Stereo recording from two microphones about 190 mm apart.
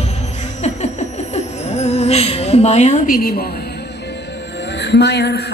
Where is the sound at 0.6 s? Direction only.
35° left (ahead or behind).